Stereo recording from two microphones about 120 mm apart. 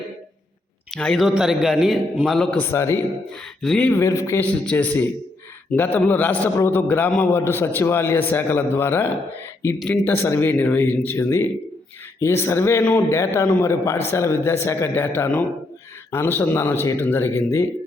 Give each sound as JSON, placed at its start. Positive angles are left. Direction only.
{"t": 0.9, "sound": "speech", "side_deg": 5}
{"t": 1.3, "sound": "a man's voice", "side_deg": -5}
{"t": 2.6, "sound": "speech", "side_deg": 20}
{"t": 3.6, "sound": "a man's voice", "side_deg": 5}
{"t": 3.9, "sound": "speech", "side_deg": 25}
{"t": 4.6, "sound": "a man's voice", "side_deg": 10}
{"t": 9.7, "sound": "a man's voice", "side_deg": 5}
{"t": 10.1, "sound": "speech", "side_deg": 20}